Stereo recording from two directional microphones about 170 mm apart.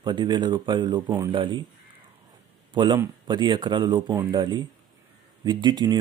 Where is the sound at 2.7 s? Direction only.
25° right (ahead or behind).